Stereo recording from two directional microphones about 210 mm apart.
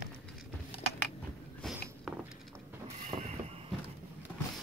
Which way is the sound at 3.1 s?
25° right (ahead or behind).